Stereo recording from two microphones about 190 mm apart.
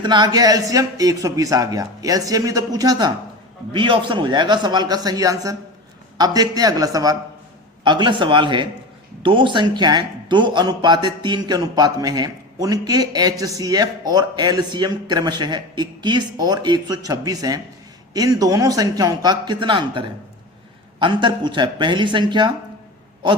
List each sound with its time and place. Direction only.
0.0 s a man's voice: 25° right (ahead or behind)